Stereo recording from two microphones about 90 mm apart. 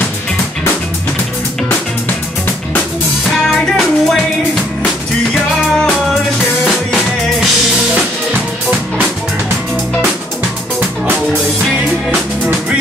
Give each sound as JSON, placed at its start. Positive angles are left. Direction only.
{"t": 3.4, "sound": "music", "side_deg": 5}
{"t": 6.6, "sound": "music", "side_deg": 0}
{"t": 8.3, "sound": "music", "side_deg": -20}